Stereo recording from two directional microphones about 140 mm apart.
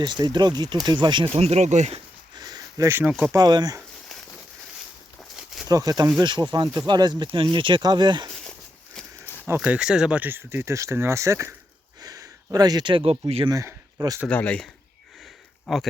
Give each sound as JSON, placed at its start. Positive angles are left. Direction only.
{"t": 0.0, "sound": "speech", "side_deg": -30}
{"t": 2.3, "sound": "a sound", "side_deg": -25}
{"t": 3.0, "sound": "speech", "side_deg": -10}
{"t": 3.3, "sound": "speech", "side_deg": -30}
{"t": 5.6, "sound": "speech", "side_deg": -25}
{"t": 9.6, "sound": "speech", "side_deg": -5}
{"t": 13.5, "sound": "speech", "side_deg": -25}
{"t": 14.3, "sound": "speech", "side_deg": 10}